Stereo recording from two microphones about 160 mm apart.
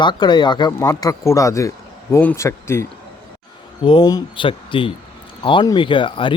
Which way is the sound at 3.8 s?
30° left (ahead or behind).